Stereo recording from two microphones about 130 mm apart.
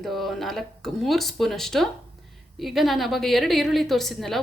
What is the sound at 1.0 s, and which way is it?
A woman's voice, centre (ahead or behind).